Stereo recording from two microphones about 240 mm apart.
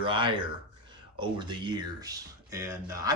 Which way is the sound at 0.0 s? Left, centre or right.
Centre.